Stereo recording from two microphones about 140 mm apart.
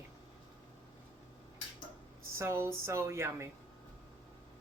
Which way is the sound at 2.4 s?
20° right (ahead or behind).